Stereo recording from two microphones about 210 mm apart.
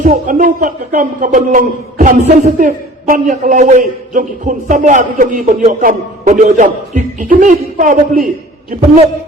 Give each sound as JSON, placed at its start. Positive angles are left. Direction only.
{"t": 0.0, "sound": "a man's voice", "side_deg": -40}